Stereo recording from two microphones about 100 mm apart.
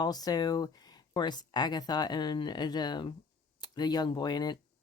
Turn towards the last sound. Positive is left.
turn(degrees=45)  # may be behind; listen again after turning